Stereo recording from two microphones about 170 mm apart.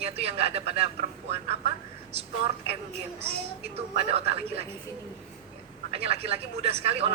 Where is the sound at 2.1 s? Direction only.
35° right (ahead or behind).